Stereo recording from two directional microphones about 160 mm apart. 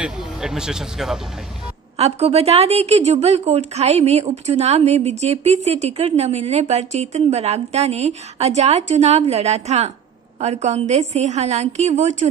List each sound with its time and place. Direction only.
0.0 s speech: 5° right (ahead or behind)
2.0 s a woman's voice: 40° right (ahead or behind)